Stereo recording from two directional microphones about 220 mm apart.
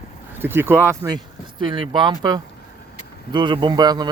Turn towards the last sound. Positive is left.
turn(degrees=-20)  # may be behind; listen again after turning